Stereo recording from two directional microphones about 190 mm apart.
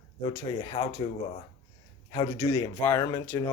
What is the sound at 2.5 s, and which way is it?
Speech, 15° left (ahead or behind).